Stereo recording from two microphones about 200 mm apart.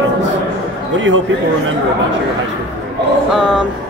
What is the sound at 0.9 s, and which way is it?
Speech, 70° right (ahead or behind).